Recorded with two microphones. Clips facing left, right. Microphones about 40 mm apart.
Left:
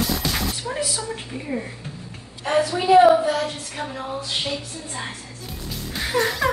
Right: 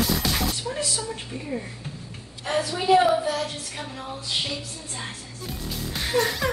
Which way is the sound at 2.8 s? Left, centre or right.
Centre.